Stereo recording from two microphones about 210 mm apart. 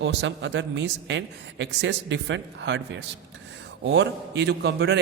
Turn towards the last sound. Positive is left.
turn(degrees=-55)  # may be behind; listen again after turning